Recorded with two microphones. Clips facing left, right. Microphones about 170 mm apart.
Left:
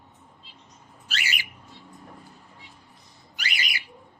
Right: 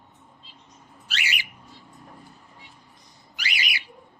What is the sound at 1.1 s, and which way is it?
Bird, 45° left (ahead or behind).